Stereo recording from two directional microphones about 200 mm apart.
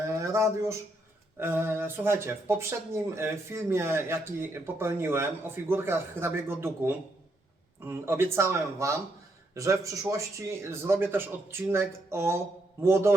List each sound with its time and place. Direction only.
0.1 s speech: 15° right (ahead or behind)